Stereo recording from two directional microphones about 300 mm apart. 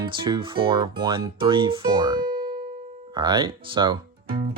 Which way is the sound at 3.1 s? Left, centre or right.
Centre.